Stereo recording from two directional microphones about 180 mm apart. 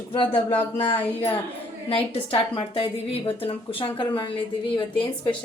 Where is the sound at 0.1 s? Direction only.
30° left (ahead or behind).